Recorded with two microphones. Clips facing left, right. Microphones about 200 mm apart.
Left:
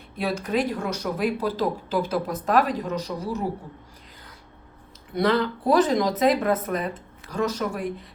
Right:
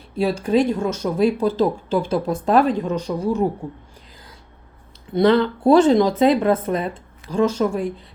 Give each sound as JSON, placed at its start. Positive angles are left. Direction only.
{"t": 0.2, "sound": "speech", "side_deg": -30}
{"t": 5.1, "sound": "speech", "side_deg": -30}